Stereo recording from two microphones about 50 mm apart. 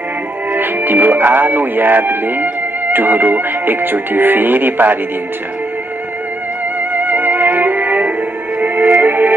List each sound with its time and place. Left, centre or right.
0.5 s speech: right
6.9 s music: right